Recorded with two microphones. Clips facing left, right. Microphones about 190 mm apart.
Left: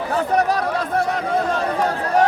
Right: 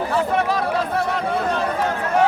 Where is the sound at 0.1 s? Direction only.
40° left (ahead or behind).